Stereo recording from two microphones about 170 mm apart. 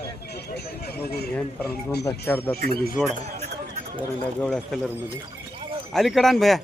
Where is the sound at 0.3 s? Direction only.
75° left (ahead or behind).